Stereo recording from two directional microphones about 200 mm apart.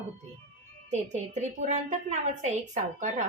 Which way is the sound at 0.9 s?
35° right (ahead or behind).